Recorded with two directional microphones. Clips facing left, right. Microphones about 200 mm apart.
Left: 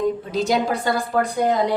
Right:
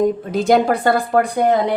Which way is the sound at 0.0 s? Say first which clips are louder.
Right 4 dB; 55° right (ahead or behind).